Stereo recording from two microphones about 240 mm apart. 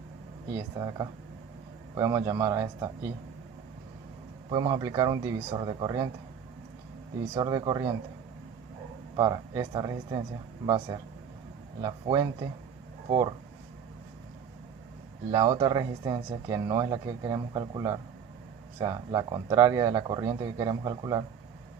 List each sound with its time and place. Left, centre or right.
0.5 s speech: centre
4.4 s speech: centre
7.3 s speech: centre
9.1 s speech: centre
15.3 s speech: centre